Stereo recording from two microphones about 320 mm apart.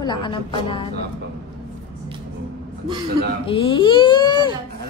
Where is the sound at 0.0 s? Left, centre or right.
Centre.